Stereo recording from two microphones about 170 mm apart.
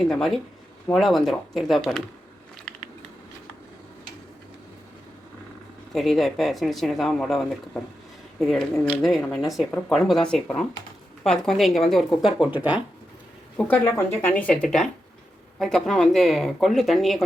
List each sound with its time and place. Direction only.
0.0 s speech: centre (ahead or behind)
5.9 s speech: centre (ahead or behind)
13.6 s speech: 10° left (ahead or behind)